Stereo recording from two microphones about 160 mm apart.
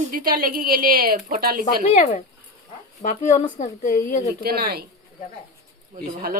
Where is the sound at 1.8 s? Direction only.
45° left (ahead or behind).